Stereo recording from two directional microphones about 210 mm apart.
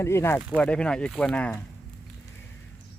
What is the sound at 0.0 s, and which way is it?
Speech, 10° left (ahead or behind).